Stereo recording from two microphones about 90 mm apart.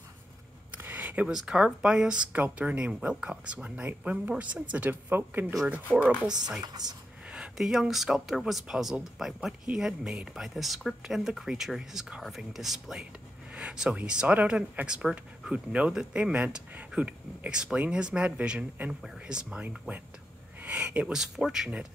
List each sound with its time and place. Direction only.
0.7 s a sound: 20° right (ahead or behind)
1.3 s a woman's voice: 5° right (ahead or behind)
6.6 s speech: 45° right (ahead or behind)
7.2 s speech: 10° right (ahead or behind)